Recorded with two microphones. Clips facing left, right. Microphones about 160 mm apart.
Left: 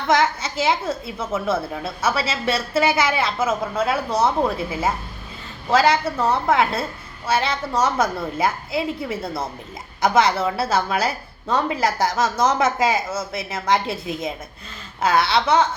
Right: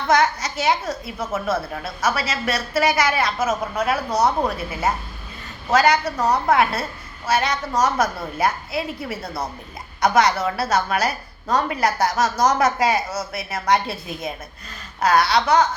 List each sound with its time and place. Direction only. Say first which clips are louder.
0.1 s a woman's voice: even; 25° left (ahead or behind)